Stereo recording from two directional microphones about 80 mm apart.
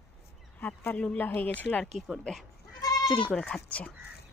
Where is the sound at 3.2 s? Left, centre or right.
Centre.